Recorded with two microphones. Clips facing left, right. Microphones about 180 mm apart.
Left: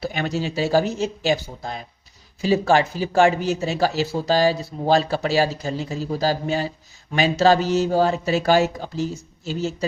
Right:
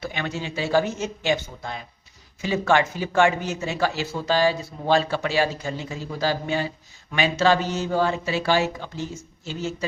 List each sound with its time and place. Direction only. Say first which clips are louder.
0.0 s speech: left 5 dB; 40° left (ahead or behind)